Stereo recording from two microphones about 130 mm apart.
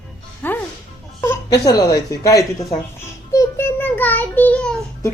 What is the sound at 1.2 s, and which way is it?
Speech, 25° left (ahead or behind).